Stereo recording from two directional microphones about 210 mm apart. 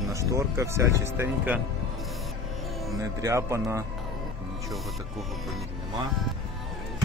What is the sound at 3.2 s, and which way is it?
Speech, 15° right (ahead or behind).